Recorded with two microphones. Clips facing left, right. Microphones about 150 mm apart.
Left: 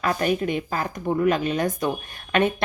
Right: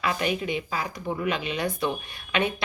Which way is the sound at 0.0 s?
45° left (ahead or behind).